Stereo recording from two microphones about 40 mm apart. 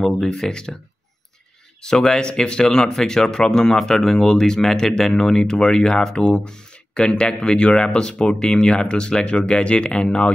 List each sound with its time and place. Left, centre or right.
0.2 s speech: centre
1.8 s speech: centre